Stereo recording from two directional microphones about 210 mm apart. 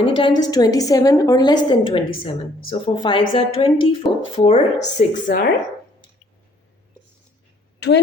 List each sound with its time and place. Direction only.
0.0 s a woman's voice: 25° left (ahead or behind)
4.9 s speech: 40° left (ahead or behind)
7.8 s speech: 55° left (ahead or behind)